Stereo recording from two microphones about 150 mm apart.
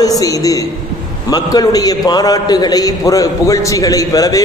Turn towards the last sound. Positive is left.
turn(degrees=25)  # may be behind; listen again after turning